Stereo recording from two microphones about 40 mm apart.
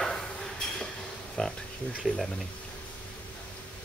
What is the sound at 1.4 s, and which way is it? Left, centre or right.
Speech, centre.